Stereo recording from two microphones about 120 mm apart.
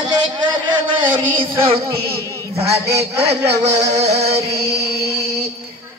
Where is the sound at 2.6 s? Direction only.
60° right (ahead or behind).